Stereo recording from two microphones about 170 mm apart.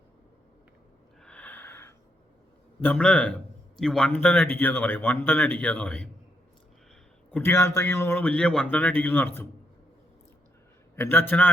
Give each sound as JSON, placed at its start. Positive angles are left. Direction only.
{"t": 1.2, "sound": "snort", "side_deg": 5}
{"t": 2.8, "sound": "speech", "side_deg": 5}
{"t": 7.3, "sound": "speech", "side_deg": 10}
{"t": 10.9, "sound": "speech", "side_deg": 15}